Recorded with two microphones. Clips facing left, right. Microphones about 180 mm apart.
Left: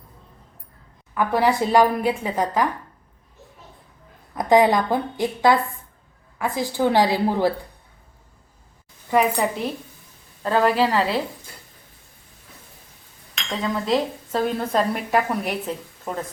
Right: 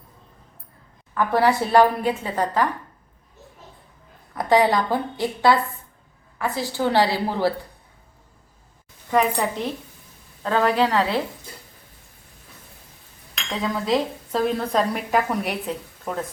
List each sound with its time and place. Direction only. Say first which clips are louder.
1.1 s a woman's voice: even; 15° left (ahead or behind)
4.4 s a woman's voice: left 2 dB; 15° left (ahead or behind)
9.0 s a woman's voice: left 1 dB; 10° left (ahead or behind)
13.6 s a woman's voice: even; centre (ahead or behind)